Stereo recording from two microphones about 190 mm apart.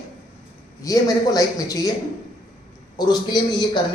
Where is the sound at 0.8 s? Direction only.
20° left (ahead or behind).